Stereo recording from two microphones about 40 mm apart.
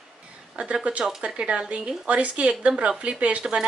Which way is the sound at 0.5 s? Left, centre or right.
Right.